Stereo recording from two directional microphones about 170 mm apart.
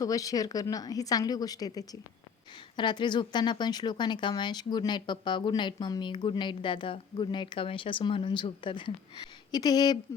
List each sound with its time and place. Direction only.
0.0 s speech: 20° left (ahead or behind)